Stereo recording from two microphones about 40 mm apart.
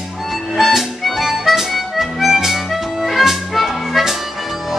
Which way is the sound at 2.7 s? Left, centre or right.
Centre.